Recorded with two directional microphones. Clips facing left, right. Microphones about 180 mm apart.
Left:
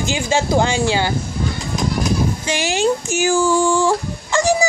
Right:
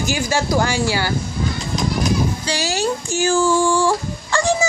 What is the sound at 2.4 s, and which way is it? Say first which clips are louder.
Speech: left 3 dB; 20° left (ahead or behind).